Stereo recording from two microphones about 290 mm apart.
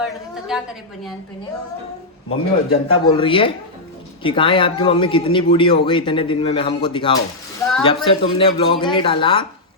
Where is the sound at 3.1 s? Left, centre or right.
Centre.